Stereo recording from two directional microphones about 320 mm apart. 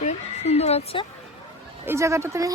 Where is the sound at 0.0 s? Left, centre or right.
Centre.